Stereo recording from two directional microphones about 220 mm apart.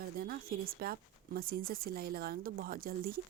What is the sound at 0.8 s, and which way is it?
Speech, 45° right (ahead or behind).